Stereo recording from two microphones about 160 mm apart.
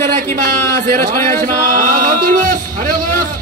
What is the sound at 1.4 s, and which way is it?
Chant, 60° right (ahead or behind).